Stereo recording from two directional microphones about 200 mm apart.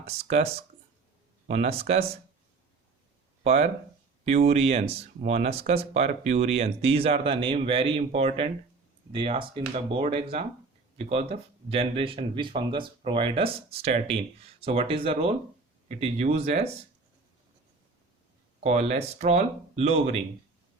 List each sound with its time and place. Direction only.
0.0 s speech: 30° right (ahead or behind)
1.5 s speech: 30° right (ahead or behind)
3.4 s speech: 30° right (ahead or behind)
18.6 s speech: 35° right (ahead or behind)